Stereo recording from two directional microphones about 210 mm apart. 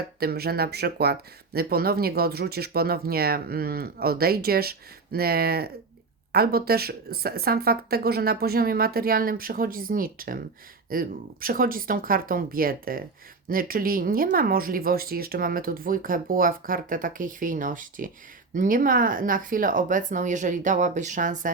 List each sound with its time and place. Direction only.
0.2 s speech: 45° right (ahead or behind)